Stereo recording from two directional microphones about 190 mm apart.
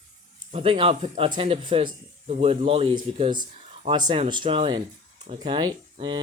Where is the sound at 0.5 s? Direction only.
30° right (ahead or behind).